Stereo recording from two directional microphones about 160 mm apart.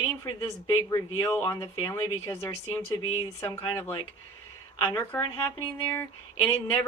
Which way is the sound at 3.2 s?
30° left (ahead or behind).